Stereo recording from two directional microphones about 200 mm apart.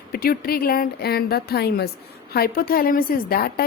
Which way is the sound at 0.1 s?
50° left (ahead or behind).